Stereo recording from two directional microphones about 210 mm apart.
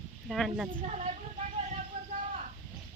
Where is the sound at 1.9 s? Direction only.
30° right (ahead or behind).